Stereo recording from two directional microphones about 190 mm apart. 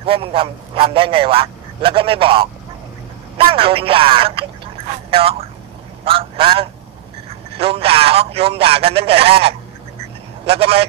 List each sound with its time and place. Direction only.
0.0 s a man's voice: 30° right (ahead or behind)